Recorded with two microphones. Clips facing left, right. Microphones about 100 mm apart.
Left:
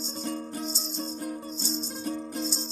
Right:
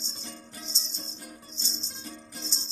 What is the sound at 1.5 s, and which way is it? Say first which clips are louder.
Music: left 11 dB; 50° left (ahead or behind).